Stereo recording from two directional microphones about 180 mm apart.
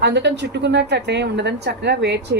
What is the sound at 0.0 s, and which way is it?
A woman's voice, 70° right (ahead or behind).